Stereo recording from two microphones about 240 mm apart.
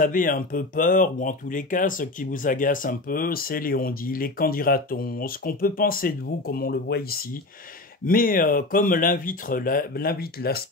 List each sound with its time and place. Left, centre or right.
0.0 s speech: left